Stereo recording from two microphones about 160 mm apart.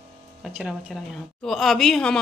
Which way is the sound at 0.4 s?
5° right (ahead or behind).